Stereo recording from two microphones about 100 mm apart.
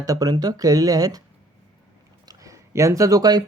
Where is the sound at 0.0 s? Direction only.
35° right (ahead or behind).